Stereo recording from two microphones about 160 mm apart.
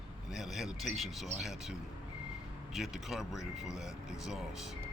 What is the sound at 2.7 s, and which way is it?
Speech, centre (ahead or behind).